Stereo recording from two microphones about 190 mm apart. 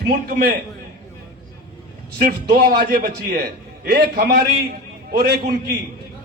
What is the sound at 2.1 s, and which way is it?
A man's voice, 55° right (ahead or behind).